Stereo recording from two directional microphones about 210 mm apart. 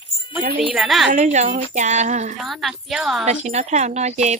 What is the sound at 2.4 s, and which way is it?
Speech, centre (ahead or behind).